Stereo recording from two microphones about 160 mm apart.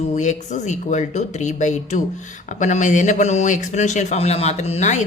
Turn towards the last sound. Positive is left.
turn(degrees=45)  # may be behind; listen again after turning